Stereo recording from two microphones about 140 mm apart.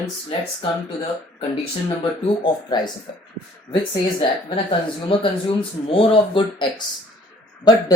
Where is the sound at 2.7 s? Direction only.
30° left (ahead or behind).